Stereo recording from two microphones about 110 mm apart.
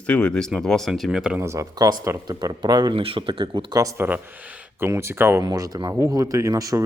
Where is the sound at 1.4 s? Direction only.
30° right (ahead or behind).